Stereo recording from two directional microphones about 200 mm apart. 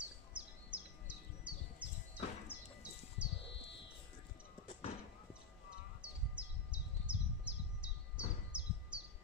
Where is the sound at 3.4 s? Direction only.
65° left (ahead or behind).